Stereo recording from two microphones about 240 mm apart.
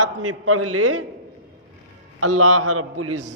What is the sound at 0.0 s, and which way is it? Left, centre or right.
A man's voice, right.